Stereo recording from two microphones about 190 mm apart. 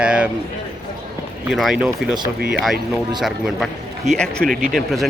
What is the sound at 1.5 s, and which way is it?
Speech, centre (ahead or behind).